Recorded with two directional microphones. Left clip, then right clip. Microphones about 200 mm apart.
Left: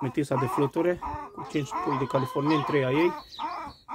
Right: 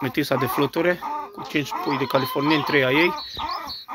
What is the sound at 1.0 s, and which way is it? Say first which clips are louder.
Speech: right 6 dB; 40° right (ahead or behind).